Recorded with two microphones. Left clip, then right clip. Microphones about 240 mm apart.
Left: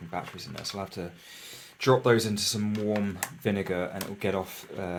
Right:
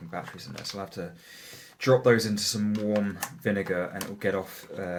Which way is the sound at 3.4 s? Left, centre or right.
Left.